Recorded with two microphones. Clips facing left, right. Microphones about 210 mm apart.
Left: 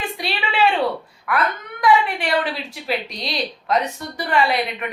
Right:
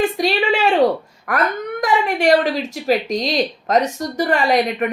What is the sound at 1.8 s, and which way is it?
Speech, 45° right (ahead or behind).